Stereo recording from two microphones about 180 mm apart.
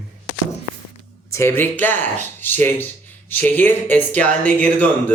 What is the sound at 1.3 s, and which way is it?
A man's voice, 15° left (ahead or behind).